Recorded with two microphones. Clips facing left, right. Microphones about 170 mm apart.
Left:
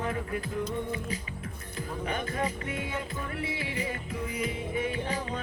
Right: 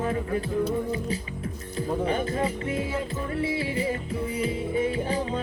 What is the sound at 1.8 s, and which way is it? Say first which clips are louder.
Speech: right 8 dB; 30° right (ahead or behind).